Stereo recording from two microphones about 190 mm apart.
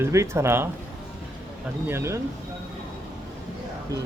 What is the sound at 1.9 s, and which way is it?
Speech, 15° right (ahead or behind).